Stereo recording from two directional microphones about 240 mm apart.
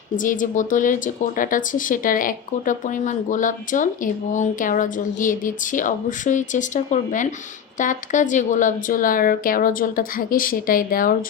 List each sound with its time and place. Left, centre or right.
0.2 s speech: left